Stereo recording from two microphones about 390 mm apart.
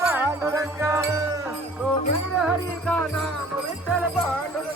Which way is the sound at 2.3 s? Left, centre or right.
Centre.